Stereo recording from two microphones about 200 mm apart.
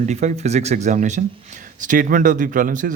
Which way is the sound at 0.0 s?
35° right (ahead or behind).